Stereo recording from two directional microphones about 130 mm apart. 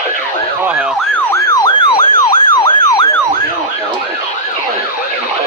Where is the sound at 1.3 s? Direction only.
30° left (ahead or behind).